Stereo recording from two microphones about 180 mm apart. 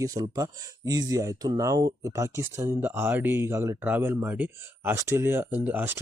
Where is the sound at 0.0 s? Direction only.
20° right (ahead or behind).